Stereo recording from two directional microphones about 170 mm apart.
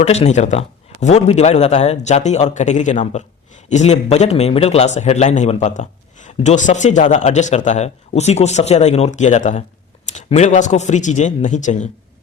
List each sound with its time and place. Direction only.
0.0 s speech: 40° left (ahead or behind)